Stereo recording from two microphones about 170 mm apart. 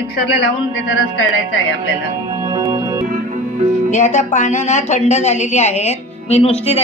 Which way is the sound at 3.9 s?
45° left (ahead or behind).